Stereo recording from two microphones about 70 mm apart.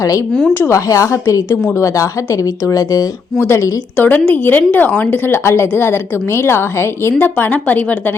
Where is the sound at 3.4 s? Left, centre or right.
Left.